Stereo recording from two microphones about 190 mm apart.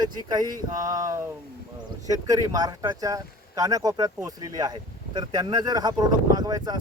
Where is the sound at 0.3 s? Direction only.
20° right (ahead or behind).